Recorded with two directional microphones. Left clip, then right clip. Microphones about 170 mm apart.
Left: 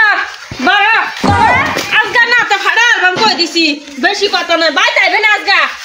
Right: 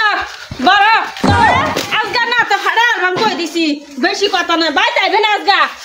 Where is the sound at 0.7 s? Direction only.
35° right (ahead or behind).